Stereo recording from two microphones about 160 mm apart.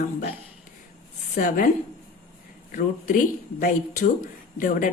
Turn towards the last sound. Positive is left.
turn(degrees=55)  # may be behind; listen again after turning